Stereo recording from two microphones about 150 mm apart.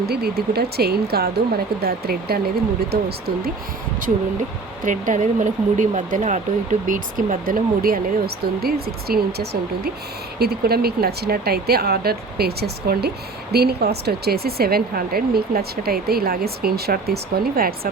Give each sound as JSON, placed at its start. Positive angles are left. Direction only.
{"t": 0.0, "sound": "speech", "side_deg": -90}
{"t": 4.8, "sound": "speech", "side_deg": -60}
{"t": 8.6, "sound": "speech", "side_deg": -90}